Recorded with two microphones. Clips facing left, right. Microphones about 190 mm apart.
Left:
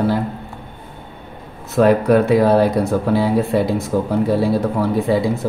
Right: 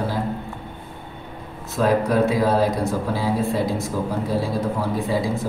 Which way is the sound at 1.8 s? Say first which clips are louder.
Left 6 dB; 65° left (ahead or behind).